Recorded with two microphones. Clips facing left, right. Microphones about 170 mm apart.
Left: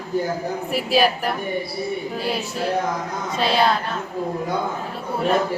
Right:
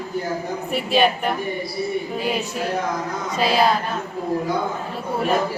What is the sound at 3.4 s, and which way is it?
Speech, centre (ahead or behind).